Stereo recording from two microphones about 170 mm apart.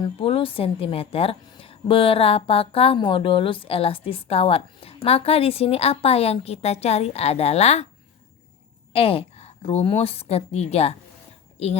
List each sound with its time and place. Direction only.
0.0 s a woman's voice: 35° left (ahead or behind)
8.9 s a woman's voice: 35° left (ahead or behind)